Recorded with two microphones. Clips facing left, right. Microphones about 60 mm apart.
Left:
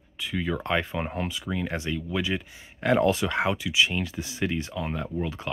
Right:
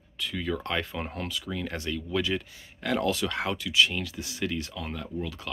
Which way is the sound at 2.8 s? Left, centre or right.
Left.